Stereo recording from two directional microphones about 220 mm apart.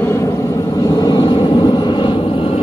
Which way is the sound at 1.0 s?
20° left (ahead or behind).